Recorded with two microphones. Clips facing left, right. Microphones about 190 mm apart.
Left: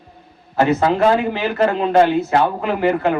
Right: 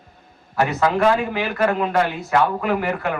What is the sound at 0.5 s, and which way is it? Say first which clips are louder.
Speech: left 4 dB; 25° left (ahead or behind).